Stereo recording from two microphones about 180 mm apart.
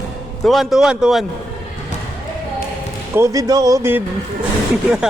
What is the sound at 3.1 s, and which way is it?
Speech, 15° right (ahead or behind).